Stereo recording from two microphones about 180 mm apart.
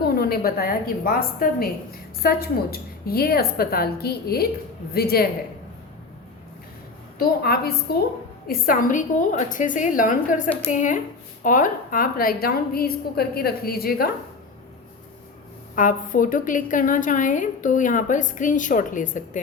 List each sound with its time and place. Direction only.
0.0 s a woman's voice: 60° left (ahead or behind)
7.2 s a woman's voice: 60° left (ahead or behind)
15.7 s a woman's voice: 50° left (ahead or behind)